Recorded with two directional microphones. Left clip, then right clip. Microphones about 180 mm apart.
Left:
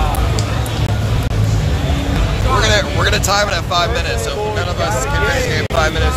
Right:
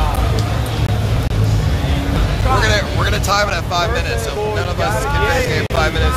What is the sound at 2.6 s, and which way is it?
Vehicle, 30° left (ahead or behind).